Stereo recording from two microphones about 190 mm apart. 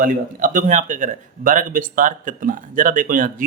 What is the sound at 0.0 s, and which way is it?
Speech, 45° right (ahead or behind).